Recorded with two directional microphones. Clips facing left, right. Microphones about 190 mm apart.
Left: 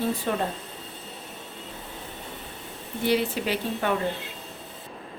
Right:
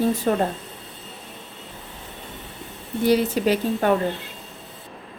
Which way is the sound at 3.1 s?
40° right (ahead or behind).